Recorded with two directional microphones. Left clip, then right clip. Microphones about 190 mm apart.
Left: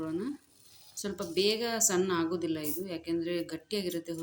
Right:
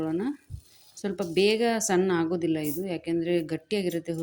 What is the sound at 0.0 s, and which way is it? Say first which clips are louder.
Speech: right 6 dB; 30° right (ahead or behind).